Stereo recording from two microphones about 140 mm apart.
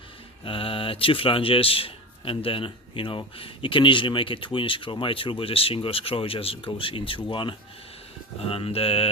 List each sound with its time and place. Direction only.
0.4 s a man's voice: 40° left (ahead or behind)
8.4 s mantra: 45° left (ahead or behind)